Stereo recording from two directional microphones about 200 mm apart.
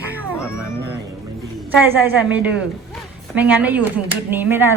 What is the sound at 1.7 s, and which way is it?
A woman's voice, 10° right (ahead or behind).